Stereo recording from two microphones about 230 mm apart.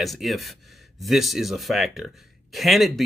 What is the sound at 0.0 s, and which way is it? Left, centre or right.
Speech, centre.